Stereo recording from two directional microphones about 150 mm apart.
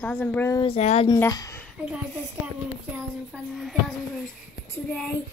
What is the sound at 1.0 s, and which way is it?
Speech, 25° left (ahead or behind).